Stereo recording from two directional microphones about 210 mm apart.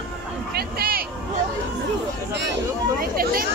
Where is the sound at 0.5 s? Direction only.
45° right (ahead or behind).